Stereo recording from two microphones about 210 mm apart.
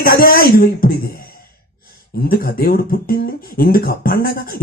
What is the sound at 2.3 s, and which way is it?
Speech, 45° left (ahead or behind).